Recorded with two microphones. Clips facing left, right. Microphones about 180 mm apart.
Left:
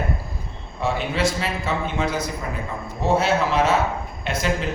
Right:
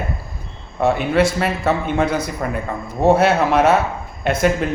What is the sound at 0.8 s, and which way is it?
A man's voice, 60° right (ahead or behind).